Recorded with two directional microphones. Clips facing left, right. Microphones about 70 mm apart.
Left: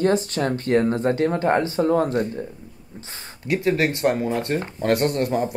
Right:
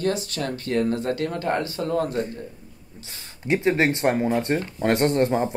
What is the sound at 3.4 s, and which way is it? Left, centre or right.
Speech, right.